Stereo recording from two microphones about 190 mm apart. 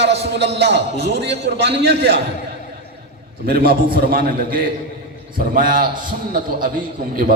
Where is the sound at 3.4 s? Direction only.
50° right (ahead or behind).